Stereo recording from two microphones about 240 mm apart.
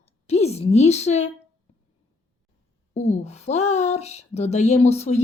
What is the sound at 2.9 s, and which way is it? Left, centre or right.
Speech, left.